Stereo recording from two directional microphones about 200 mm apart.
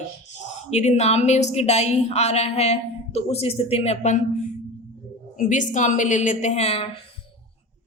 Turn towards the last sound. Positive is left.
turn(degrees=30)  # may be behind; listen again after turning